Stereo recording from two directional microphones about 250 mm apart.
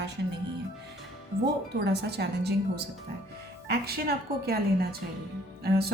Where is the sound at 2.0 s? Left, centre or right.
Right.